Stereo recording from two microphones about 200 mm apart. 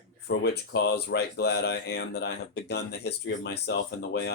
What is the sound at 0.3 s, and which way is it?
Speech, 55° left (ahead or behind).